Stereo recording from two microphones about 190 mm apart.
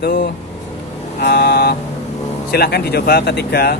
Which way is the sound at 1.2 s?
55° left (ahead or behind).